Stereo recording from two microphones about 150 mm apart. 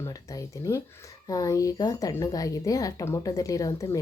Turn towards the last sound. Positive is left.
turn(degrees=20)  # may be behind; listen again after turning